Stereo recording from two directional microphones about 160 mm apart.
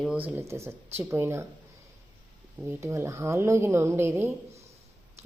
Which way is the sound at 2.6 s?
15° right (ahead or behind).